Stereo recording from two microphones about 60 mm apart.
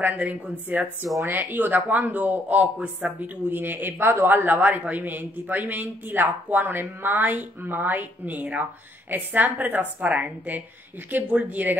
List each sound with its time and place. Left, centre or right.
0.0 s a woman's voice: right
1.0 s speech: right
1.3 s a woman's voice: right